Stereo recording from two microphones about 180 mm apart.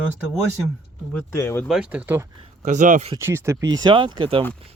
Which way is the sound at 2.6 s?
45° right (ahead or behind).